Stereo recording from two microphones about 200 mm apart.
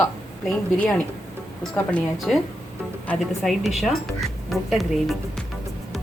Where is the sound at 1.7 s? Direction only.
5° left (ahead or behind).